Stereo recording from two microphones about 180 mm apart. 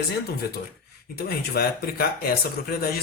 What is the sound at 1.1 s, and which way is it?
A man's voice, 60° left (ahead or behind).